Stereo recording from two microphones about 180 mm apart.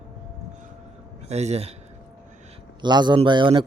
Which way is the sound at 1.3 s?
35° right (ahead or behind).